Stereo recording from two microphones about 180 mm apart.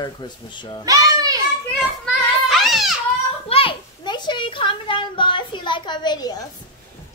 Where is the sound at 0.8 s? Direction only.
20° right (ahead or behind).